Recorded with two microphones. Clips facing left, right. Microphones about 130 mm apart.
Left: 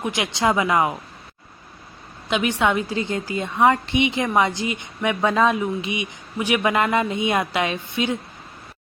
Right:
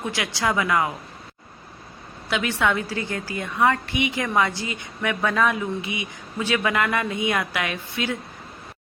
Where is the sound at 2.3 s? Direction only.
20° left (ahead or behind).